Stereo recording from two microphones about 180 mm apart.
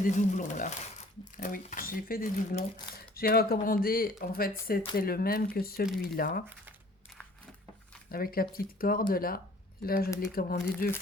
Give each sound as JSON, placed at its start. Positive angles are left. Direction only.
{"t": 0.0, "sound": "speech", "side_deg": 45}
{"t": 8.1, "sound": "speech", "side_deg": 55}